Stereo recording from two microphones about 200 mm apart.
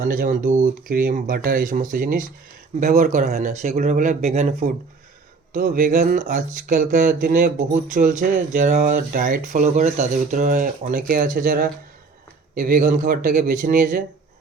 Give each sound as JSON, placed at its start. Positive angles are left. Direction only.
{"t": 0.0, "sound": "speech", "side_deg": -45}